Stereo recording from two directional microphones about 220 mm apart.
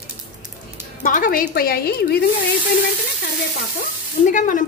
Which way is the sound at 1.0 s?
35° left (ahead or behind).